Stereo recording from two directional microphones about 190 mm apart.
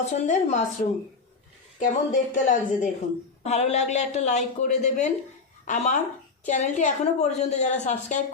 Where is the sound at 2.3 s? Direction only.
40° left (ahead or behind).